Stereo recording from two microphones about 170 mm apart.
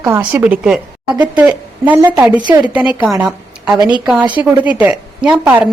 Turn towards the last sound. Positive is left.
turn(degrees=-5)  # may be behind; listen again after turning